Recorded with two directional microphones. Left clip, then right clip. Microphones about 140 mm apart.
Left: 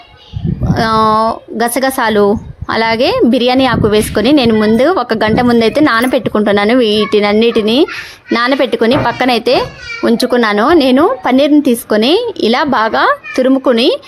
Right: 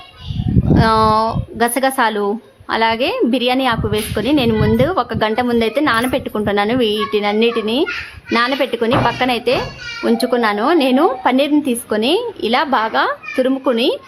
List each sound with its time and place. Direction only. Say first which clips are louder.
0.7 s a woman's voice: left 3 dB; 40° left (ahead or behind)